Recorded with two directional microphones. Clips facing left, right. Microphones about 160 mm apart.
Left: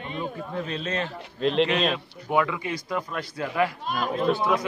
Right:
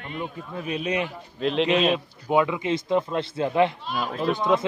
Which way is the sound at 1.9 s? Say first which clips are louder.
Right 4 dB; 20° right (ahead or behind).